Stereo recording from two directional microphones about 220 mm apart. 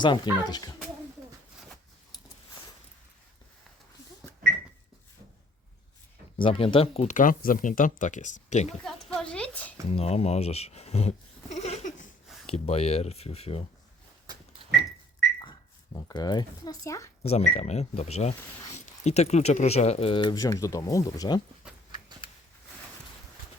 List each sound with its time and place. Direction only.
0.0 s speech: 20° left (ahead or behind)
6.4 s speech: 25° left (ahead or behind)
8.8 s a sound: 5° left (ahead or behind)
9.9 s a sound: 30° left (ahead or behind)
12.5 s speech: 25° left (ahead or behind)
16.0 s speech: 20° left (ahead or behind)
17.2 s speech: 30° left (ahead or behind)